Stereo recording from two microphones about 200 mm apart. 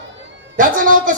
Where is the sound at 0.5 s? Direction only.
40° right (ahead or behind).